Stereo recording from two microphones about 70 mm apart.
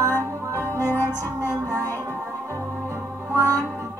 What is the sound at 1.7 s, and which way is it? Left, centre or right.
Music, right.